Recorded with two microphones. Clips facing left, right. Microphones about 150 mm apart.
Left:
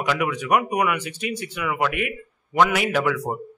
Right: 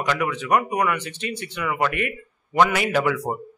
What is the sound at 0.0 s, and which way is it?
Speech, 10° left (ahead or behind).